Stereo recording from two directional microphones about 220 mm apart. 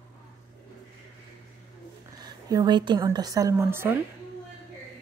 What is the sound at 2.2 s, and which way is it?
A woman's voice, 15° right (ahead or behind).